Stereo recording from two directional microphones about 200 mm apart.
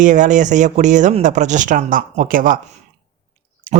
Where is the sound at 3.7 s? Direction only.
35° right (ahead or behind).